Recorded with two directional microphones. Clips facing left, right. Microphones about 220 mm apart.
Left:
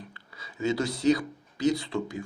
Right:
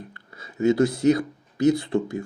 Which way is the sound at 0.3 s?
55° right (ahead or behind).